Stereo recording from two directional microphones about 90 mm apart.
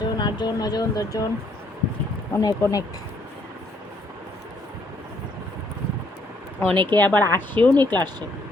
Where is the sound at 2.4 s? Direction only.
45° left (ahead or behind).